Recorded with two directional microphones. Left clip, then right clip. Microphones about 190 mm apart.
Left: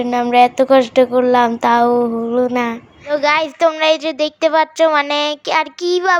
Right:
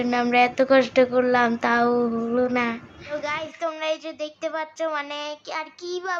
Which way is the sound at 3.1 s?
45° left (ahead or behind).